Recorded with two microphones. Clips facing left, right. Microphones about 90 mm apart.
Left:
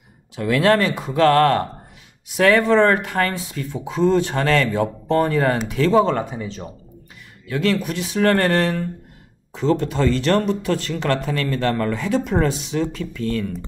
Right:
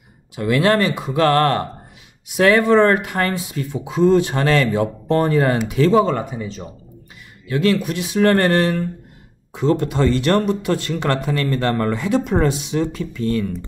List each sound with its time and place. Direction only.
0.7 s speech: 10° right (ahead or behind)
7.5 s speech: 10° right (ahead or behind)
9.6 s speech: 15° right (ahead or behind)